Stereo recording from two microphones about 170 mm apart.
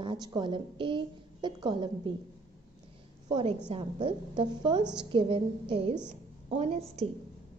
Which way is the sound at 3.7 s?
35° right (ahead or behind).